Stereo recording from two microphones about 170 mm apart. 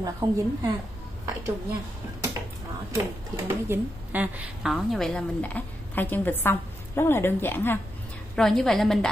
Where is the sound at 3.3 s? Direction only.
10° right (ahead or behind); by 7.8 s 15° left (ahead or behind).